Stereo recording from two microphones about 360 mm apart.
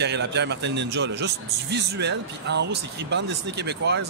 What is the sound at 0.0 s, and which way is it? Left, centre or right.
A man's voice, right.